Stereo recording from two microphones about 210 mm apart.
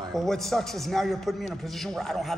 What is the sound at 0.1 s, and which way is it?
A man's voice, centre (ahead or behind).